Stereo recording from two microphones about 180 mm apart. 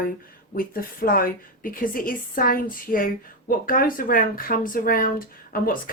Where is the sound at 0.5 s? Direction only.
55° left (ahead or behind).